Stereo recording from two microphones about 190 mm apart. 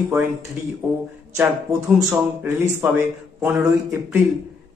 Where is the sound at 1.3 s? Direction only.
15° right (ahead or behind).